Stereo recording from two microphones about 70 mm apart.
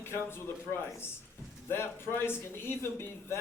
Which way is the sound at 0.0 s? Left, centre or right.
Left.